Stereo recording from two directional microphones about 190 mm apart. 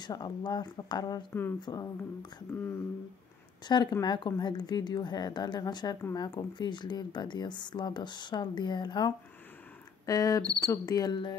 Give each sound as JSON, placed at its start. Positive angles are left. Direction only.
{"t": 0.0, "sound": "speech", "side_deg": 20}
{"t": 3.6, "sound": "speech", "side_deg": 20}